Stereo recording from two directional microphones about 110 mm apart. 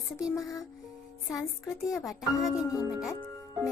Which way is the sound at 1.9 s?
Centre (ahead or behind).